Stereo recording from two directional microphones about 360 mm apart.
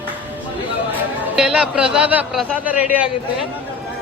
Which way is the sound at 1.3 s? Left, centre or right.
Centre.